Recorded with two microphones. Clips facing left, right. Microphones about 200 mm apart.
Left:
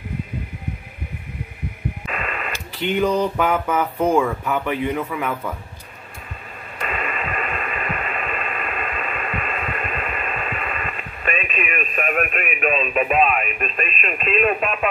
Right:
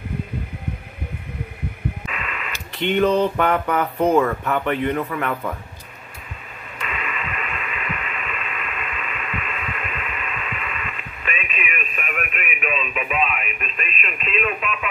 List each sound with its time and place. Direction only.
2.1 s radio: 45° left (ahead or behind)
2.8 s speech: 5° left (ahead or behind)
6.8 s radio: 45° left (ahead or behind)